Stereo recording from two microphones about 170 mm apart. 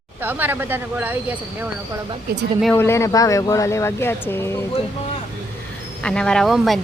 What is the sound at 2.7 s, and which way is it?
Speech, 15° left (ahead or behind).